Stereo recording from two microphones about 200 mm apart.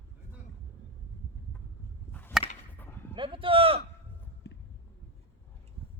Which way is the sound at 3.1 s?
25° right (ahead or behind).